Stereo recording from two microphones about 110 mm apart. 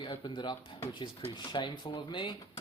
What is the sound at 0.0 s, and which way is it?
Speech, 45° left (ahead or behind).